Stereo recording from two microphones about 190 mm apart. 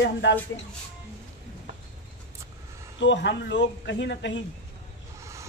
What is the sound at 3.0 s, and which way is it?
Speech, 70° left (ahead or behind).